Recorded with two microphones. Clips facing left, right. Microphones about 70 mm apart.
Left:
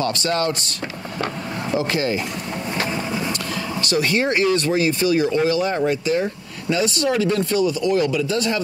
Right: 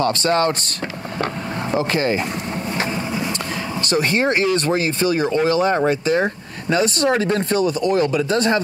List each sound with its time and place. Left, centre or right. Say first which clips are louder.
0.0 s speech: right 4 dB; right
1.7 s speech: right 2 dB; right
3.9 s speech: right 2 dB; right